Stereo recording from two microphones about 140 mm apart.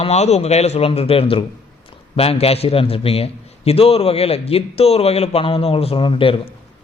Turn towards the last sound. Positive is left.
turn(degrees=40)  # may be behind; listen again after turning